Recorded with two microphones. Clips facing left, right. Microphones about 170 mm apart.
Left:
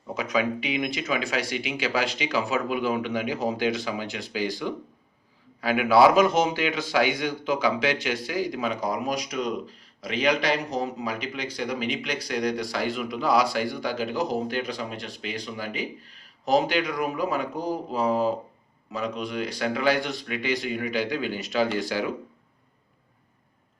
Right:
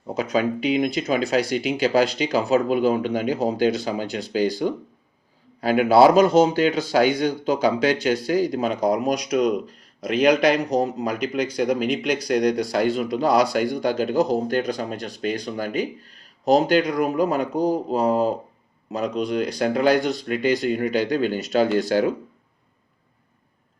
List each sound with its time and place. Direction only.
0.1 s speech: 40° right (ahead or behind)